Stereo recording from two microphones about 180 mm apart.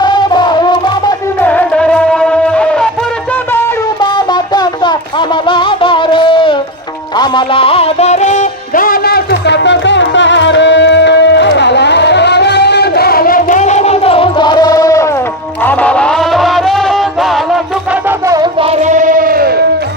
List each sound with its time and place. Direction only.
0.0 s music: 25° left (ahead or behind)
1.4 s music: 10° left (ahead or behind)
4.0 s music: 25° left (ahead or behind)
15.6 s music: 10° left (ahead or behind)
18.6 s a sound: 40° right (ahead or behind); by 19.6 s 55° right (ahead or behind)